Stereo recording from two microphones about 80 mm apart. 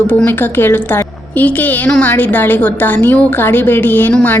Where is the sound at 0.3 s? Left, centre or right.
Left.